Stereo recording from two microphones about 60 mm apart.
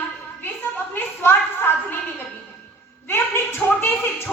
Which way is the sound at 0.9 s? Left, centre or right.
Left.